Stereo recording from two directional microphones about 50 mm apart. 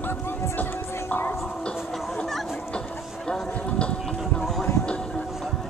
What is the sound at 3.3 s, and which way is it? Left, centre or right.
Music, left.